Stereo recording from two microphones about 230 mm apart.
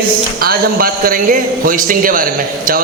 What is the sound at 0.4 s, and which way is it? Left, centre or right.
A man's voice, right.